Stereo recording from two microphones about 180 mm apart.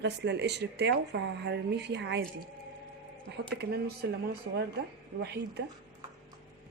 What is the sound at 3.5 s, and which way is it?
Speech, 65° right (ahead or behind).